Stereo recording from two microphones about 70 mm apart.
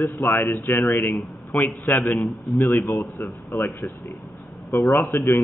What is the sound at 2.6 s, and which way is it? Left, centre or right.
A man's voice, left.